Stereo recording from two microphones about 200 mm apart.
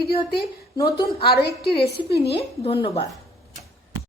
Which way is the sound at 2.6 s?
25° left (ahead or behind).